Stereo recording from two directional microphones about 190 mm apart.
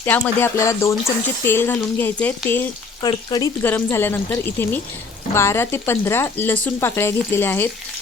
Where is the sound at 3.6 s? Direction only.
10° left (ahead or behind).